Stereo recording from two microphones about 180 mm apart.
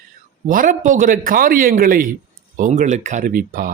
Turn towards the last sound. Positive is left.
turn(degrees=-50)  # may be behind; listen again after turning